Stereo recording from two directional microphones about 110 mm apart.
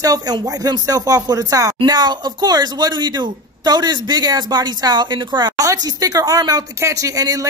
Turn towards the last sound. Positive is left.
turn(degrees=-30)  # may be behind; listen again after turning